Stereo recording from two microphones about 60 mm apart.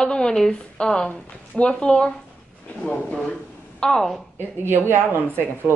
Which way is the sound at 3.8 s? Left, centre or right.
Centre.